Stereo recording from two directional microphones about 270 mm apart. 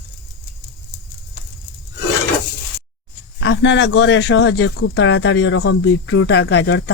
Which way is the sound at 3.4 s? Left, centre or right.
Left.